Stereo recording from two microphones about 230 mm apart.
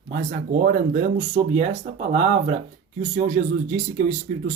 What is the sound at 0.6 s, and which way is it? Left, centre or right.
Speech, right.